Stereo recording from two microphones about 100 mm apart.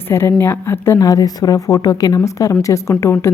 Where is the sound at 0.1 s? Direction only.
25° left (ahead or behind).